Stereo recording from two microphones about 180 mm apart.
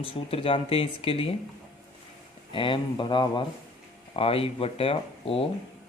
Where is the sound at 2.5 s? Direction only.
30° left (ahead or behind).